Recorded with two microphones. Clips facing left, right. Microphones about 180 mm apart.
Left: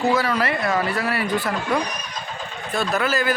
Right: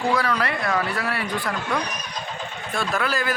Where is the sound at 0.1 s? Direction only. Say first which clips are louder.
Left 2 dB; 5° left (ahead or behind).